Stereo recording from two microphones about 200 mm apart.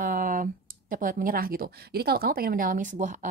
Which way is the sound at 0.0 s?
40° right (ahead or behind).